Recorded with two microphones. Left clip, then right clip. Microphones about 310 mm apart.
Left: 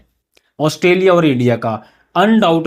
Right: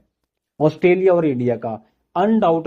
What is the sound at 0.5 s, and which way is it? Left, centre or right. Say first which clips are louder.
Speech: left 2 dB; left.